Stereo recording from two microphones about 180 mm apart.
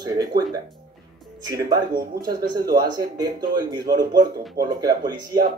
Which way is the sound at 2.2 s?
20° right (ahead or behind).